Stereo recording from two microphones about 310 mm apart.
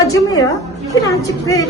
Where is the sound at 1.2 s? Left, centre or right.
Centre.